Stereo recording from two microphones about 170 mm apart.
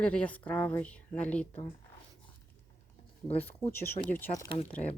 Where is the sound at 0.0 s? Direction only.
5° left (ahead or behind).